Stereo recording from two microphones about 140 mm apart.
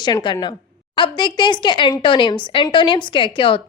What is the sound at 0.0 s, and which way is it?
A woman's voice, 35° left (ahead or behind).